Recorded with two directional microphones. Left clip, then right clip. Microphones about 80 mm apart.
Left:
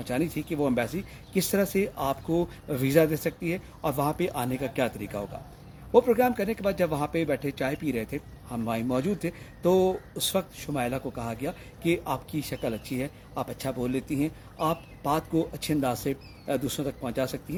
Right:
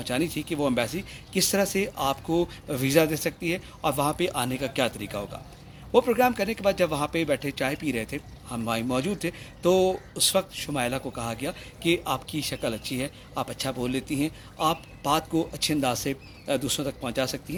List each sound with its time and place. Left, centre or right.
0.0 s speech: left